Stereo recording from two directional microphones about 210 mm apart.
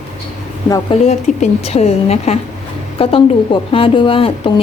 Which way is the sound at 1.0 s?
30° left (ahead or behind).